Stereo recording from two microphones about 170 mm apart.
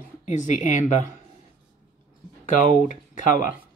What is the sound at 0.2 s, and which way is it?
Speech, 45° left (ahead or behind).